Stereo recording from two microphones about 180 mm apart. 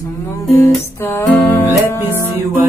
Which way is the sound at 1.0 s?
15° left (ahead or behind).